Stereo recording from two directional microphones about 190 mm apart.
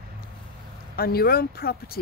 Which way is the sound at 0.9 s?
50° left (ahead or behind).